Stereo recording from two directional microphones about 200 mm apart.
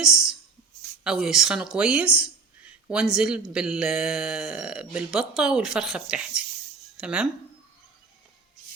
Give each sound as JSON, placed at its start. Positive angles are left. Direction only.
{"t": 0.0, "sound": "speech", "side_deg": -5}